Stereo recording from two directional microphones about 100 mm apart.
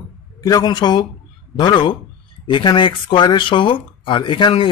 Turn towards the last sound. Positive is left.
turn(degrees=55)  # may be behind; listen again after turning